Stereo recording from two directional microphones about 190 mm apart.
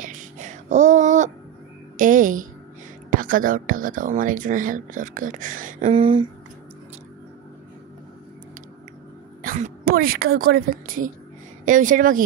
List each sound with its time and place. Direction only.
0.0 s a sound: 40° right (ahead or behind)
2.0 s speech: 45° right (ahead or behind)
5.9 s speech: 25° right (ahead or behind)
9.4 s a woman's voice: 45° right (ahead or behind)